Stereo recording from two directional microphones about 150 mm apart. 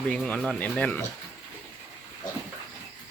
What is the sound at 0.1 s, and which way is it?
Speech, 5° left (ahead or behind).